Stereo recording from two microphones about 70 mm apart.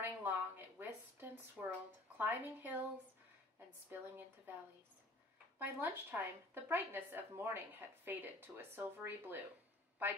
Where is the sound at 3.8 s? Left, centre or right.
Right.